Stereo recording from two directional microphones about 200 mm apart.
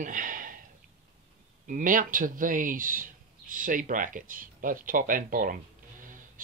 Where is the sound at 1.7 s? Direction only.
40° right (ahead or behind).